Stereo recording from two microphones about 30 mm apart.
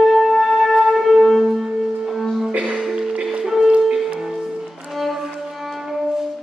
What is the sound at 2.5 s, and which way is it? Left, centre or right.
Music, right.